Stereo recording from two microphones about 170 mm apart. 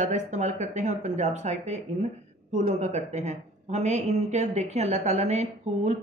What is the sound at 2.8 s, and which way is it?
Speech, 40° right (ahead or behind).